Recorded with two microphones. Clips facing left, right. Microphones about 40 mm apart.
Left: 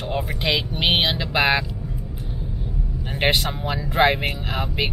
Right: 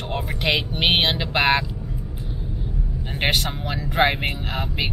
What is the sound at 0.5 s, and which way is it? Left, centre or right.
Speech, right.